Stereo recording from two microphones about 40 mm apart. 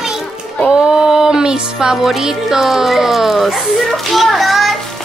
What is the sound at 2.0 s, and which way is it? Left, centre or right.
A woman's voice, centre.